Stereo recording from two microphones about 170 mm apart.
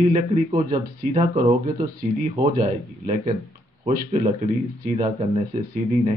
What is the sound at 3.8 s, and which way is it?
Speech, 35° right (ahead or behind).